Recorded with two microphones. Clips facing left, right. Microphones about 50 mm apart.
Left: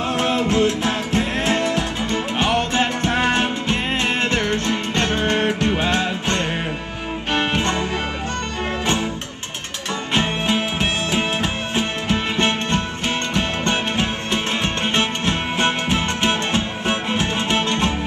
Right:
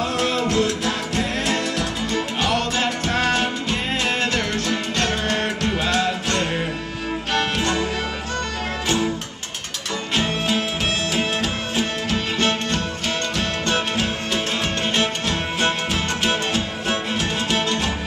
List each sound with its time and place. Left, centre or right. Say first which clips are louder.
0.2 s music: left 3 dB; left
10.1 s music: left 2 dB; left